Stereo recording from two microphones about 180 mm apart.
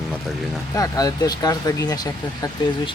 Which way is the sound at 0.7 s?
20° left (ahead or behind).